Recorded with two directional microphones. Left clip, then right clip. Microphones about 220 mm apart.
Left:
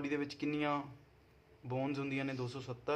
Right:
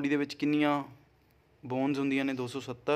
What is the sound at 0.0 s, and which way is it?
Speech, 45° right (ahead or behind).